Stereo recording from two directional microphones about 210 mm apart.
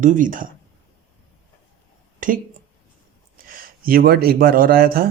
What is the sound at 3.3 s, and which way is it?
A man's voice, 45° right (ahead or behind).